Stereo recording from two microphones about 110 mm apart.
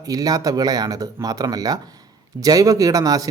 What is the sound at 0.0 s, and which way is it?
Speech, 35° right (ahead or behind).